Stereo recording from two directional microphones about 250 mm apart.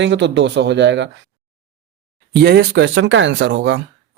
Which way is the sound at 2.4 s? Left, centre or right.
Right.